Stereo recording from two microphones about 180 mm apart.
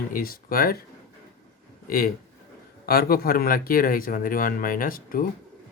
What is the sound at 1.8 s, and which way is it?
Speech, 50° left (ahead or behind).